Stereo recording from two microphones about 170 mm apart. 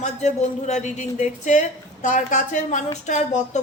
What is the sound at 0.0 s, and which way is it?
A woman's voice, 45° left (ahead or behind).